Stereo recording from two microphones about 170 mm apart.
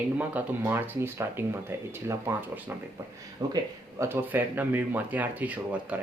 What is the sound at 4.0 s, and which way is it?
Speech, 10° right (ahead or behind).